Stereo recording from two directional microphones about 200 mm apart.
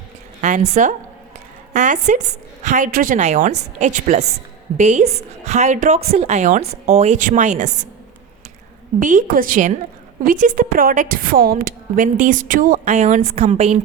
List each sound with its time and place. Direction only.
0.4 s a woman's voice: 35° right (ahead or behind)
9.0 s a woman's voice: 40° right (ahead or behind)